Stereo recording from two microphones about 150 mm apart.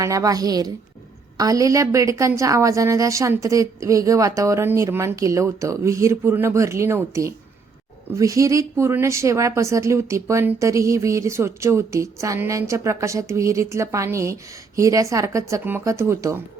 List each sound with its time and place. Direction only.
0.0 s a woman's voice: 20° right (ahead or behind)